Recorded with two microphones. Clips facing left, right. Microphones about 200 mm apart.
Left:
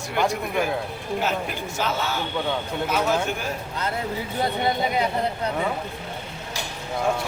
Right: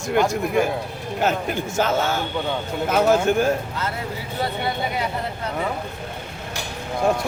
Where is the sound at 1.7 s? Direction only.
50° right (ahead or behind).